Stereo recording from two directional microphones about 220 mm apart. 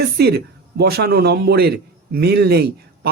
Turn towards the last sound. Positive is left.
turn(degrees=-45)  # may be behind; listen again after turning